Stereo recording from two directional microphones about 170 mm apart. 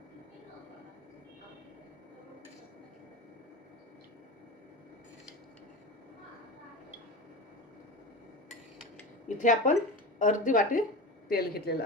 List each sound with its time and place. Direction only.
9.4 s speech: 50° left (ahead or behind)
11.3 s speech: 65° left (ahead or behind)